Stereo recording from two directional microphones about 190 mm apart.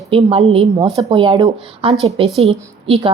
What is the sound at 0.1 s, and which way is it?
A woman's voice, 30° right (ahead or behind).